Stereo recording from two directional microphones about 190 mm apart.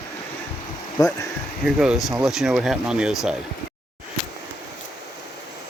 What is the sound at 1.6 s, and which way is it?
Speech, 5° right (ahead or behind).